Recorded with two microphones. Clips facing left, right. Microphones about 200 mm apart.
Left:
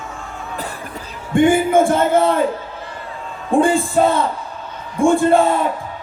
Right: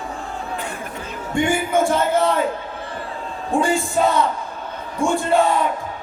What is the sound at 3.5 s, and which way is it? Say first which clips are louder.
Speech: left 6 dB; 55° left (ahead or behind).